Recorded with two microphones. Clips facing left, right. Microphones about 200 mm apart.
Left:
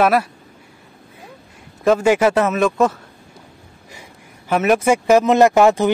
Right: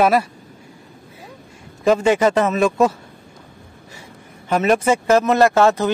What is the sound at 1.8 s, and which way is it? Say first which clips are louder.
A man's voice: left 1 dB; 5° left (ahead or behind).